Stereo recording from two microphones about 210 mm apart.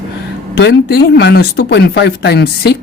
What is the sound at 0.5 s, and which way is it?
Speech, 50° left (ahead or behind).